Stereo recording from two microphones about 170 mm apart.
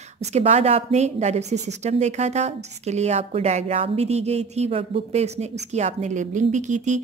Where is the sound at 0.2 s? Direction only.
40° right (ahead or behind).